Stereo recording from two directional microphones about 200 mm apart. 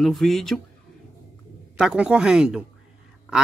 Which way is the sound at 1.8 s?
5° right (ahead or behind).